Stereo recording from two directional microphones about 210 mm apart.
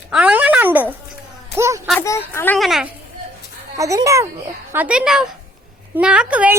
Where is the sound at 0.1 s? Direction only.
5° right (ahead or behind).